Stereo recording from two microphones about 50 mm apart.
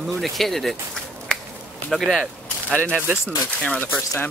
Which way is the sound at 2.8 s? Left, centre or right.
Right.